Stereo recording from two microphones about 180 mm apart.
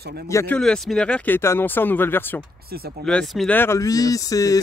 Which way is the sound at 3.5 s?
15° left (ahead or behind).